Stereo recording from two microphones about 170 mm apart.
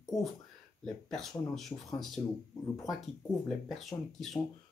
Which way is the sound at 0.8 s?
Centre (ahead or behind).